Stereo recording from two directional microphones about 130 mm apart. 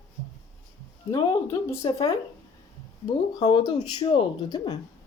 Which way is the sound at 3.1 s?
35° left (ahead or behind).